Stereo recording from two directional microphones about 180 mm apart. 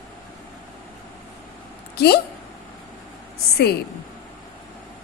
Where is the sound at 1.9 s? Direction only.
60° left (ahead or behind).